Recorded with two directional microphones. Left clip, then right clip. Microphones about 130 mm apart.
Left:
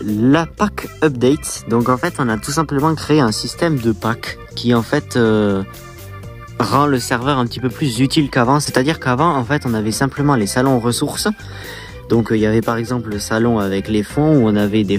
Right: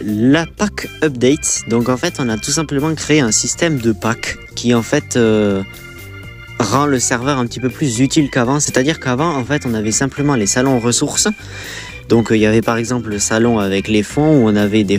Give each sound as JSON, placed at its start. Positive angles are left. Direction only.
{"t": 0.2, "sound": "speech", "side_deg": -25}